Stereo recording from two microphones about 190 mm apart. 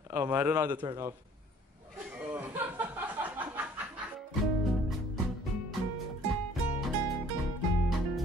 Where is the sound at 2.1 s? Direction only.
10° right (ahead or behind).